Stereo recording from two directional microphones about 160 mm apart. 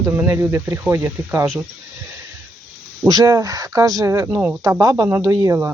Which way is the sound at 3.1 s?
20° right (ahead or behind).